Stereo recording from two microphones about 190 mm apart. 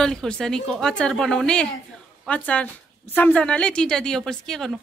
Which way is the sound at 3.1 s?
10° left (ahead or behind).